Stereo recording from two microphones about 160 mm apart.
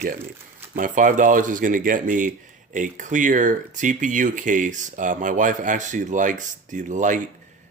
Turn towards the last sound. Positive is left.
turn(degrees=-50)  # may be behind; listen again after turning